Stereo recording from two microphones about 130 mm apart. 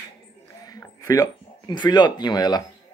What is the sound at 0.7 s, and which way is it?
Speech, 25° left (ahead or behind).